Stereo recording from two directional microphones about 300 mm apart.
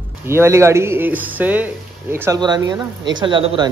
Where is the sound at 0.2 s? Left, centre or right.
Centre.